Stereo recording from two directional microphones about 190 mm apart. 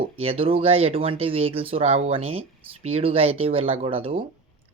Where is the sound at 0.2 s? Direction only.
30° right (ahead or behind).